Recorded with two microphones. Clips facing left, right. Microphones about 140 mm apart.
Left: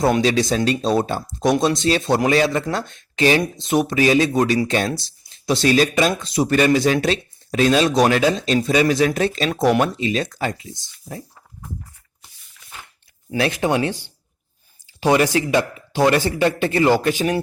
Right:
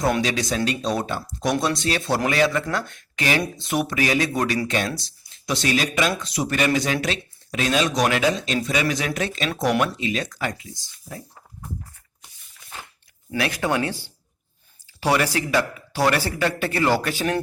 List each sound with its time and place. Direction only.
0.0 s speech: 30° left (ahead or behind)
13.4 s speech: 20° left (ahead or behind)